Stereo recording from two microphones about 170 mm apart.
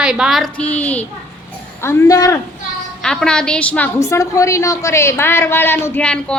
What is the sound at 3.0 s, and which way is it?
A woman's voice, 5° left (ahead or behind).